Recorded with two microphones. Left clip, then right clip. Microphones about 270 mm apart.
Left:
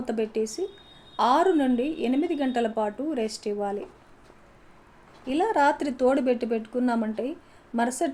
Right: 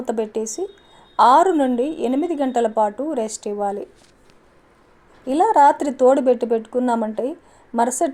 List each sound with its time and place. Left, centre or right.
0.0 s a woman's voice: right
5.2 s a woman's voice: right